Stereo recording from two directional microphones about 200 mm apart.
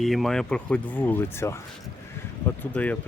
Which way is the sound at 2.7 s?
5° left (ahead or behind).